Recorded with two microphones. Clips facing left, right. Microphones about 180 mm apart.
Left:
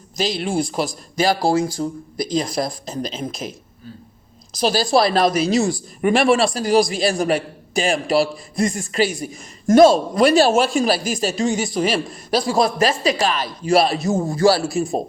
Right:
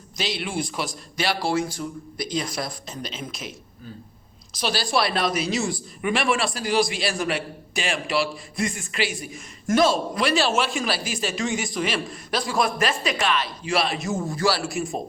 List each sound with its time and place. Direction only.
0.2 s a man's voice: 40° left (ahead or behind)
4.6 s a man's voice: 40° left (ahead or behind)